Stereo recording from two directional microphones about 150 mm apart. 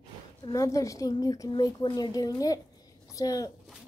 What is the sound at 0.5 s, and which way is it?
A woman's voice, 20° left (ahead or behind).